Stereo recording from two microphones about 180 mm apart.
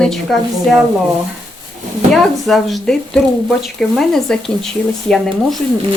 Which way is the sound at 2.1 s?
Centre (ahead or behind).